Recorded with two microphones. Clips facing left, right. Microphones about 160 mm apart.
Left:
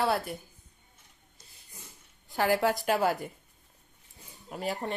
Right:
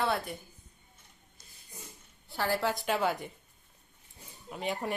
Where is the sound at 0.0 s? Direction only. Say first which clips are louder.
Left 3 dB; centre (ahead or behind).